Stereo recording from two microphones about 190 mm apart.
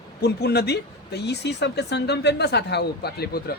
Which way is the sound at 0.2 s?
60° left (ahead or behind).